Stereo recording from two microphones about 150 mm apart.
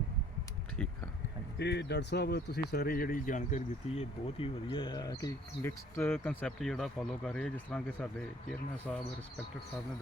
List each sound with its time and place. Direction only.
0.8 s speech: 5° left (ahead or behind)
1.5 s speech: 90° left; by 4.0 s 55° left (ahead or behind)
4.4 s speech: 35° left (ahead or behind); by 9.0 s centre (ahead or behind)